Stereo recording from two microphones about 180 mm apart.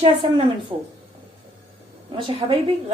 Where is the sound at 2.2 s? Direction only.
30° right (ahead or behind).